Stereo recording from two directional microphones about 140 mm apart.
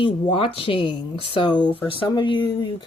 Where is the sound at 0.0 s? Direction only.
40° left (ahead or behind).